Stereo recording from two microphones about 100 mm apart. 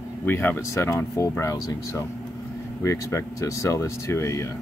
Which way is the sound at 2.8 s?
30° left (ahead or behind).